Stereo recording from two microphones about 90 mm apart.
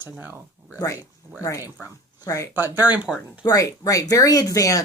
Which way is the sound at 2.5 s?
25° right (ahead or behind).